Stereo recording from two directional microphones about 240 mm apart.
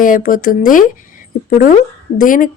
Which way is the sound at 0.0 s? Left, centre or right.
Left.